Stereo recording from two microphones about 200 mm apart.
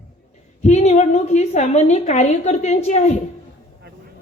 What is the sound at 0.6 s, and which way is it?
A woman's voice, 35° left (ahead or behind).